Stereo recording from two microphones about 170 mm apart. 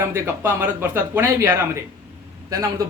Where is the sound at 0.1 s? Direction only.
15° right (ahead or behind).